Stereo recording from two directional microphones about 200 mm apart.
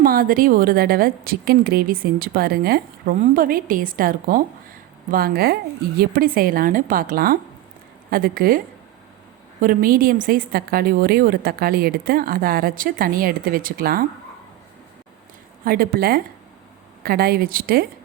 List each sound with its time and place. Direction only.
0.0 s a woman's voice: 45° right (ahead or behind)
15.6 s a woman's voice: 50° right (ahead or behind)